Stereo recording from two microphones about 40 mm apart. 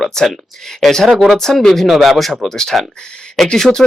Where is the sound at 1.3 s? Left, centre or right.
Centre.